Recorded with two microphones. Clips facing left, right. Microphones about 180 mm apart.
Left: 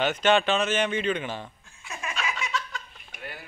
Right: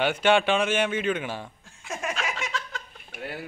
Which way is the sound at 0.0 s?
10° right (ahead or behind).